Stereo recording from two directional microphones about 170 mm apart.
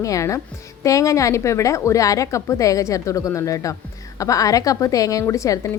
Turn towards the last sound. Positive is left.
turn(degrees=20)  # may be behind; listen again after turning